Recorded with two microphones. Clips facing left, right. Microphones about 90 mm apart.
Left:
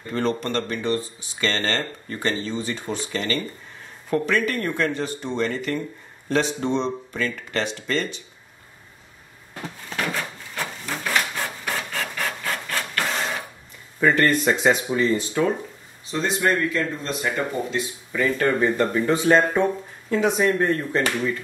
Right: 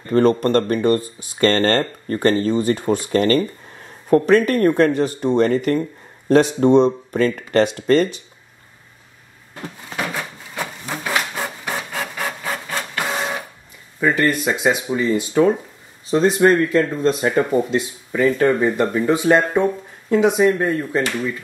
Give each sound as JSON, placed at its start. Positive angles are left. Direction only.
{"t": 0.1, "sound": "speech", "side_deg": -45}
{"t": 9.9, "sound": "a sound", "side_deg": -10}
{"t": 13.9, "sound": "speech", "side_deg": -5}
{"t": 15.0, "sound": "speech", "side_deg": -15}
{"t": 16.1, "sound": "speech", "side_deg": -35}
{"t": 18.2, "sound": "speech", "side_deg": -15}